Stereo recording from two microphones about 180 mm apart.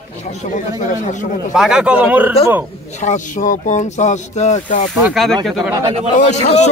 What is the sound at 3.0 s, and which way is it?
Speech, 40° left (ahead or behind).